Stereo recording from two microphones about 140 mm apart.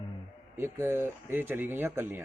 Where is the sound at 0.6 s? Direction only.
15° right (ahead or behind).